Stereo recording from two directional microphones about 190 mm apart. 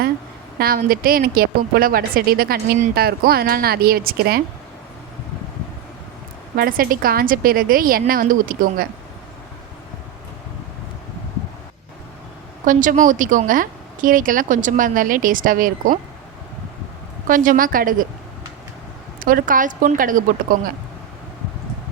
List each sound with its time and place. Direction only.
0.6 s a woman's voice: 50° right (ahead or behind)
6.6 s a woman's voice: 50° right (ahead or behind)
12.6 s a woman's voice: 40° right (ahead or behind)
17.2 s a woman's voice: 45° right (ahead or behind)
19.2 s a woman's voice: 45° right (ahead or behind)